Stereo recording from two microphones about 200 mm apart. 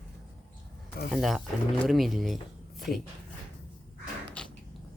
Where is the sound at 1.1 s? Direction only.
Centre (ahead or behind).